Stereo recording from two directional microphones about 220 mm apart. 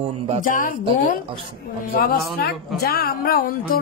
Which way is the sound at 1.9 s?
45° left (ahead or behind).